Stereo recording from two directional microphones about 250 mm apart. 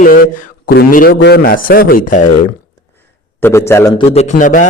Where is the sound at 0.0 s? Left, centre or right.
Left.